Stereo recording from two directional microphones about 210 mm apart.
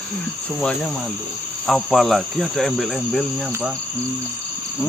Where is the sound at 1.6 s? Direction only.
Centre (ahead or behind).